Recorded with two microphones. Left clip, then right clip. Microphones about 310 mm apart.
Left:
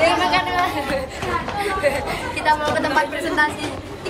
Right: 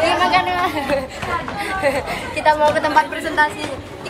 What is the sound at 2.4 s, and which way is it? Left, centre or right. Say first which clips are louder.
Speech: right 4 dB; centre.